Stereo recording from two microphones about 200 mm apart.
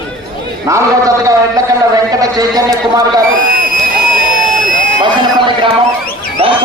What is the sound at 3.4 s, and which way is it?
Crowd, 45° right (ahead or behind).